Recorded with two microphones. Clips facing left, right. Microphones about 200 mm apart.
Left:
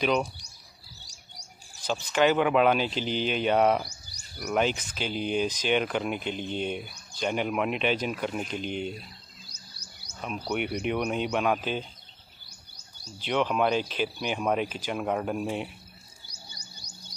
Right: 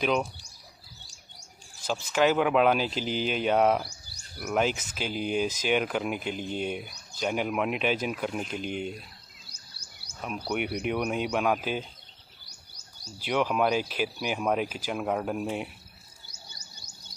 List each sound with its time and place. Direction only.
0.0 s speech: centre (ahead or behind)
1.9 s speech: 5° right (ahead or behind)
9.5 s music: 30° right (ahead or behind)
10.2 s speech: 5° right (ahead or behind)
12.4 s music: 40° right (ahead or behind)
13.2 s speech: 5° right (ahead or behind)